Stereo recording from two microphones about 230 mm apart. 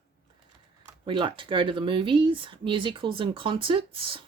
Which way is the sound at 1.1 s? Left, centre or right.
Right.